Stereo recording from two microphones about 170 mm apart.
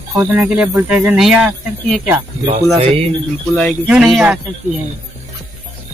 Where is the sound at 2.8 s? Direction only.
35° right (ahead or behind).